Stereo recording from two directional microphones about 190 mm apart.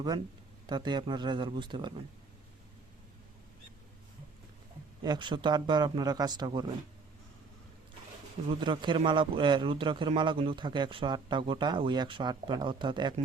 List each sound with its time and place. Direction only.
0.7 s speech: 25° right (ahead or behind)
5.0 s speech: 25° right (ahead or behind)
8.4 s speech: 25° right (ahead or behind)